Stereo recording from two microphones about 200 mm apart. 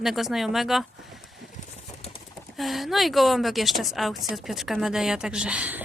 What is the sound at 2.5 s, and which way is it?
A woman's voice, centre (ahead or behind).